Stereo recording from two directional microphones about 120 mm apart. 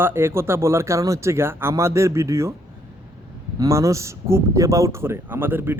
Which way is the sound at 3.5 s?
25° right (ahead or behind).